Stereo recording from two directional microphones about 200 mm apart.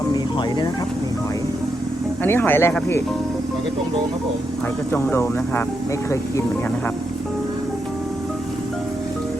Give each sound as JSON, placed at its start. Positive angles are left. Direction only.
{"t": 0.1, "sound": "music", "side_deg": 20}
{"t": 2.2, "sound": "speech", "side_deg": 10}
{"t": 4.9, "sound": "speech", "side_deg": 10}